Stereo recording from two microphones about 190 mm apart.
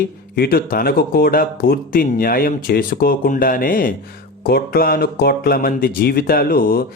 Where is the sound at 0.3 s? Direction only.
55° left (ahead or behind).